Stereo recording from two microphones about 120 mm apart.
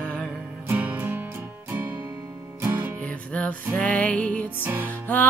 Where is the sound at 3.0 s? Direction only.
10° left (ahead or behind).